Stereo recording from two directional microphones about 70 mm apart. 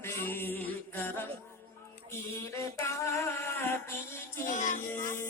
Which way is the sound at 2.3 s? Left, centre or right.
Left.